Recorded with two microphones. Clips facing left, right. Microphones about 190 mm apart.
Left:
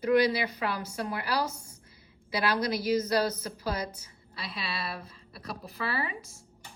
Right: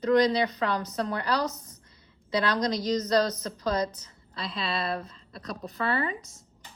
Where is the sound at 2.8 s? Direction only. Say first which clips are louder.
Right 2 dB; 10° left (ahead or behind).